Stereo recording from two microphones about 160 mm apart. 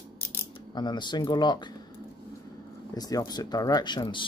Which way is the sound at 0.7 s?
30° left (ahead or behind).